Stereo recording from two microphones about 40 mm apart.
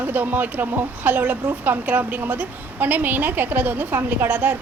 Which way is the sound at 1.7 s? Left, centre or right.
Right.